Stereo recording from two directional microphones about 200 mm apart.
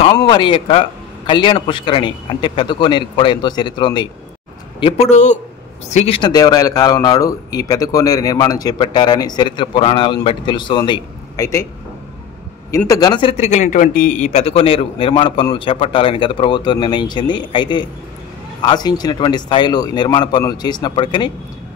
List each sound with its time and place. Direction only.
0.0 s speech: 25° left (ahead or behind)
12.7 s speech: 15° left (ahead or behind)